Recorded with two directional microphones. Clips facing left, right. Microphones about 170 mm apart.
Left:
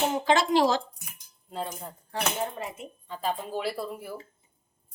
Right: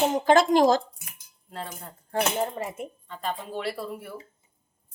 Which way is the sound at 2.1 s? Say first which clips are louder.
Right 5 dB; 50° right (ahead or behind).